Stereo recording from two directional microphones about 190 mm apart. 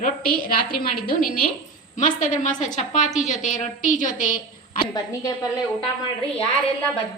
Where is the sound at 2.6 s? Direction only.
40° left (ahead or behind).